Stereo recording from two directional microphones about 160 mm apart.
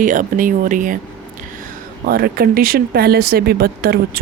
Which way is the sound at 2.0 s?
75° right (ahead or behind).